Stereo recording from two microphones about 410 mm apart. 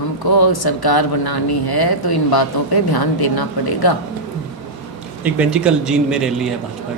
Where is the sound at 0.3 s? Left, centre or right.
Left.